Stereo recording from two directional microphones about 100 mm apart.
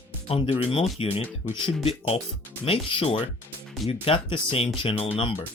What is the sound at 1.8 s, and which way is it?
Speech, 90° left.